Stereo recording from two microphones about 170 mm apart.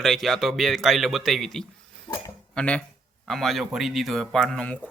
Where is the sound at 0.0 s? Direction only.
Centre (ahead or behind).